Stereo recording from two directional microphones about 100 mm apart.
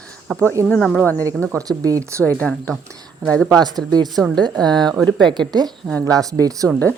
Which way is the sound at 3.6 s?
45° right (ahead or behind).